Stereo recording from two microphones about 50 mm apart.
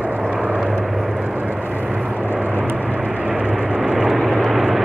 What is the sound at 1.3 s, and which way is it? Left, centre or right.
Vehicle, centre.